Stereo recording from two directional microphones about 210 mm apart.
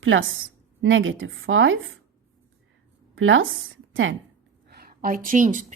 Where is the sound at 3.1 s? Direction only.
70° right (ahead or behind).